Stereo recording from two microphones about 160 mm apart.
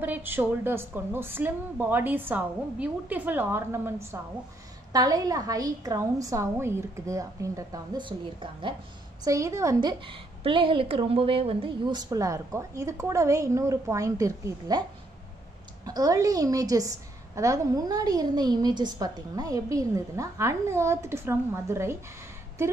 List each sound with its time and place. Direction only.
0.0 s a woman's voice: 10° right (ahead or behind); by 8.7 s 30° right (ahead or behind)
9.2 s a woman's voice: 20° right (ahead or behind)
15.8 s a woman's voice: 20° right (ahead or behind)